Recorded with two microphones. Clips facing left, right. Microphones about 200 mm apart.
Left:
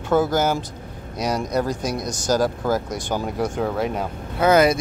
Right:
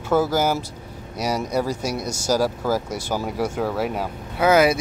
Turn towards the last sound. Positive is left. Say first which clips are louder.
# left 1 dB
turn(degrees=-5)  # may be behind; listen again after turning